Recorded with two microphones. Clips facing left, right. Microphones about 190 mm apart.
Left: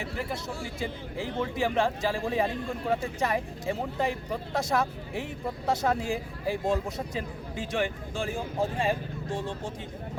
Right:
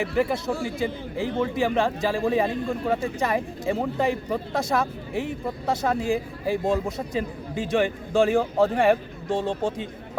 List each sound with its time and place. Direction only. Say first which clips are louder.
0.0 s a man's voice: right 10 dB; 90° right